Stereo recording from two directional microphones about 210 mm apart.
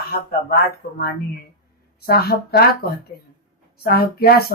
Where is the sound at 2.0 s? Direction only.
50° left (ahead or behind).